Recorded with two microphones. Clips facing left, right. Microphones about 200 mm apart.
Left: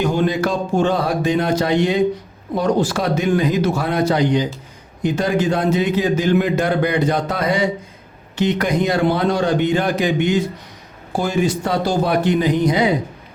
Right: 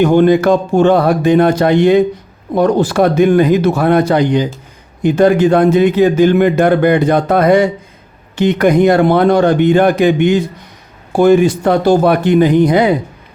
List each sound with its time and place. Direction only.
0.0 s a man's voice: 60° right (ahead or behind)